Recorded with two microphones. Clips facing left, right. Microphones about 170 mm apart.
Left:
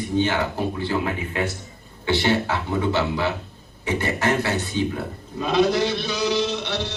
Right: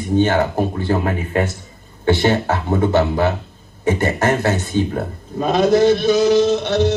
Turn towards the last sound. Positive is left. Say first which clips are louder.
# right 10 dB
turn(degrees=-45)  # may be behind; listen again after turning